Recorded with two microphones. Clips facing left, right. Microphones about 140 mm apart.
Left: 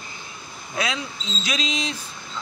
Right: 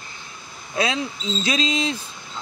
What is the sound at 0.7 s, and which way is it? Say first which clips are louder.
Speech: right 4 dB; 30° right (ahead or behind).